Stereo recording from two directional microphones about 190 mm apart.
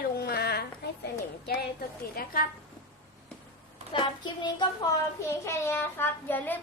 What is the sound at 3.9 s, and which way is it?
Child singing, 25° left (ahead or behind).